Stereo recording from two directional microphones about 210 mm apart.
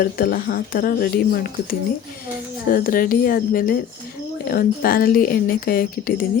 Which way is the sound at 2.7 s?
45° left (ahead or behind).